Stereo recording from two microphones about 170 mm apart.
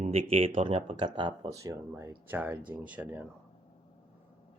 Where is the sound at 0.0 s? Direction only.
35° right (ahead or behind); by 3.2 s 10° right (ahead or behind).